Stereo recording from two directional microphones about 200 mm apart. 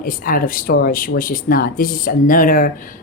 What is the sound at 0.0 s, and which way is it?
Speech, 45° left (ahead or behind).